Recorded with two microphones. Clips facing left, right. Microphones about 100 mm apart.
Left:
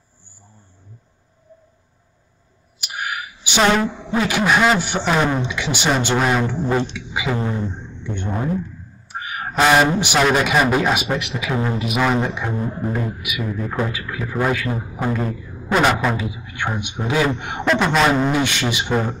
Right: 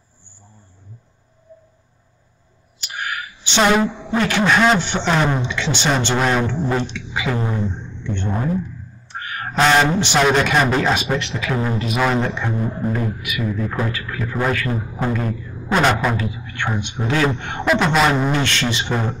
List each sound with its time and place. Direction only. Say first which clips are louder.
2.8 s a sound: even; 10° left (ahead or behind)
4.1 s a man's voice: even; 5° left (ahead or behind)
6.8 s music: left 1 dB; 15° left (ahead or behind)
7.7 s speech: right 2 dB; 10° left (ahead or behind)
9.1 s a sound: even; 10° left (ahead or behind)
10.3 s a man's voice: even; 10° left (ahead or behind)
17.6 s a man's voice: even; centre (ahead or behind)
18.4 s speech: even; 10° left (ahead or behind)